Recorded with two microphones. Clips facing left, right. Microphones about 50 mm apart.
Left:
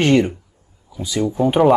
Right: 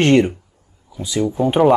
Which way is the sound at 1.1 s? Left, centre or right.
Centre.